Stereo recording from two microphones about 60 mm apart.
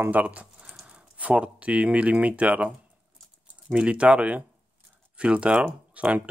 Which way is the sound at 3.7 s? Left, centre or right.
Centre.